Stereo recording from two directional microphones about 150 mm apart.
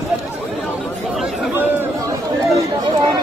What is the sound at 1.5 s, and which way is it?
Chatter, 15° right (ahead or behind).